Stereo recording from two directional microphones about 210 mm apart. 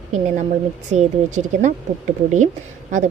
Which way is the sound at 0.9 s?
30° right (ahead or behind).